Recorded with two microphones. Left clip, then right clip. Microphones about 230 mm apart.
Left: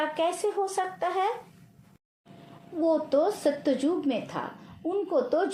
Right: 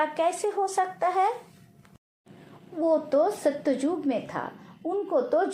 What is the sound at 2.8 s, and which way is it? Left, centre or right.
Speech, right.